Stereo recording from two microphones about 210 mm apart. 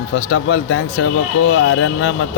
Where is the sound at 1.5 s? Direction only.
90° left.